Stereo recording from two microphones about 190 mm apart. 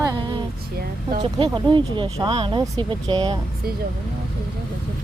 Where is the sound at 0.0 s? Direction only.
20° right (ahead or behind).